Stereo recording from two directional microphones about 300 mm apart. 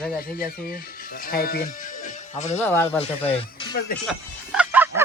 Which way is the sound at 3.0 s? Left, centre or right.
Centre.